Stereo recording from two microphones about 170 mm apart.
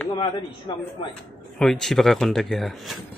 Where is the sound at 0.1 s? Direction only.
25° left (ahead or behind).